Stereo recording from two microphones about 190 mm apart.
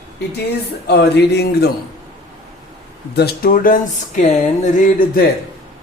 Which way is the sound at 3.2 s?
50° left (ahead or behind).